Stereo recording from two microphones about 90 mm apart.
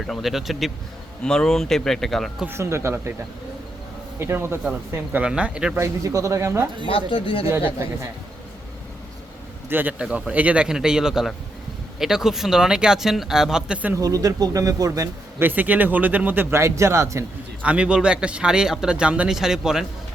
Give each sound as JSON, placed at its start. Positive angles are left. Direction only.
{"t": 0.1, "sound": "speech", "side_deg": 0}
{"t": 1.2, "sound": "speech", "side_deg": 10}
{"t": 2.5, "sound": "speech", "side_deg": -30}
{"t": 4.2, "sound": "speech", "side_deg": -30}
{"t": 5.2, "sound": "a man's voice", "side_deg": -10}
{"t": 5.7, "sound": "speech", "side_deg": -35}
{"t": 6.8, "sound": "speech", "side_deg": 80}
{"t": 9.6, "sound": "a man's voice", "side_deg": -20}
{"t": 10.0, "sound": "a man's voice", "side_deg": -10}
{"t": 14.0, "sound": "speech", "side_deg": -40}
{"t": 15.4, "sound": "speech", "side_deg": -20}
{"t": 17.6, "sound": "a man's voice", "side_deg": -15}